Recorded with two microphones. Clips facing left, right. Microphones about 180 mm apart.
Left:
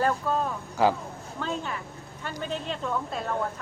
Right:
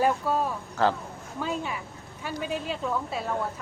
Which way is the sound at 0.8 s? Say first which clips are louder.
Left 2 dB; 10° left (ahead or behind).